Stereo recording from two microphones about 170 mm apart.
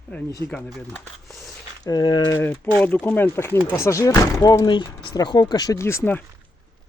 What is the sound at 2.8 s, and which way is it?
Speech, 10° left (ahead or behind).